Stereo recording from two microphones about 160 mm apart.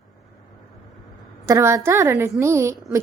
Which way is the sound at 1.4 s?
15° right (ahead or behind).